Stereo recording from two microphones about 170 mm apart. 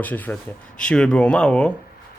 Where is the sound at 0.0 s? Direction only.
10° left (ahead or behind).